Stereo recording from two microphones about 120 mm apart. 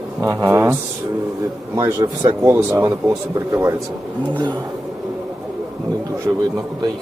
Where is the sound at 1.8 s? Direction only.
25° right (ahead or behind).